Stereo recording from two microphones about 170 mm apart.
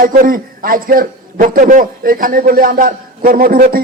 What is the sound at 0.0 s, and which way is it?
A man's voice, 55° right (ahead or behind).